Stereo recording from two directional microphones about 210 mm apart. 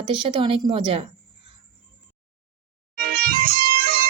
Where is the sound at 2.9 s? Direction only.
45° right (ahead or behind).